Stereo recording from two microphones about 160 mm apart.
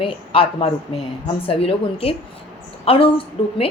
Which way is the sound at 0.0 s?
35° left (ahead or behind).